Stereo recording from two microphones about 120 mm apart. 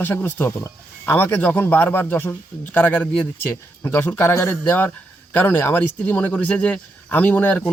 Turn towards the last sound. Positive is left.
turn(degrees=15)  # may be behind; listen again after turning